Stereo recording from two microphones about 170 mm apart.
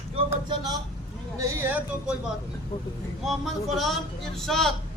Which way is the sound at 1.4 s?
15° right (ahead or behind).